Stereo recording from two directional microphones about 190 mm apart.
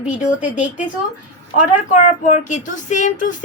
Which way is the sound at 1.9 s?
40° left (ahead or behind).